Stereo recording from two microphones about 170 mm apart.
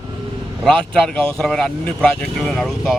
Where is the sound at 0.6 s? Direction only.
5° left (ahead or behind).